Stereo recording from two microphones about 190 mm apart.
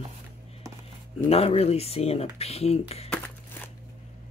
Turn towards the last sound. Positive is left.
turn(degrees=35)  # may be behind; listen again after turning